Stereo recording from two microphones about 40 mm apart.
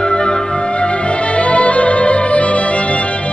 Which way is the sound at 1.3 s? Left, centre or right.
Left.